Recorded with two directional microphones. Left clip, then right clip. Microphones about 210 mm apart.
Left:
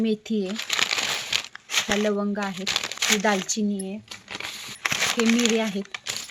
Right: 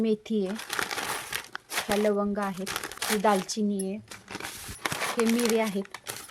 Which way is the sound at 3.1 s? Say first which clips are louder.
Left 1 dB; 5° left (ahead or behind).